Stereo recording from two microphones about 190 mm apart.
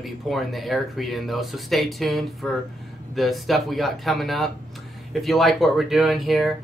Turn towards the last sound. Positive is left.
turn(degrees=0)  # may be behind; listen again after turning